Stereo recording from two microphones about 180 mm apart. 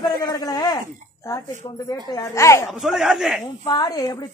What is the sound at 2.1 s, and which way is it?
Speech, 15° left (ahead or behind).